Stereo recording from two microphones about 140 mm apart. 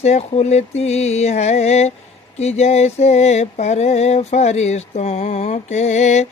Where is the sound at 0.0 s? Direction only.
50° left (ahead or behind).